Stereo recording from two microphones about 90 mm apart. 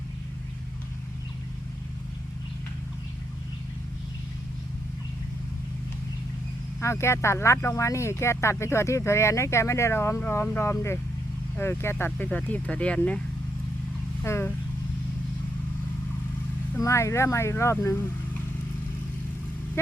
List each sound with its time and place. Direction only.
6.8 s speech: 30° left (ahead or behind); by 13.0 s 15° left (ahead or behind)
14.3 s speech: 30° left (ahead or behind)
16.8 s speech: 35° left (ahead or behind)